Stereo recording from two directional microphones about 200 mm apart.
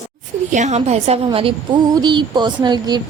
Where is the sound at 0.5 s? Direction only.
35° right (ahead or behind).